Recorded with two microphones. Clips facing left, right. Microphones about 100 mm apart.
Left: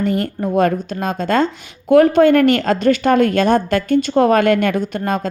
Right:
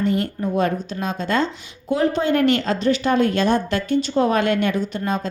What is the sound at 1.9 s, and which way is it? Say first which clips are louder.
A woman's voice: left 9 dB; 60° left (ahead or behind).